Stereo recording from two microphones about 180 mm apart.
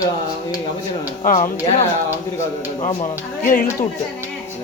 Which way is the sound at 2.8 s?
45° left (ahead or behind).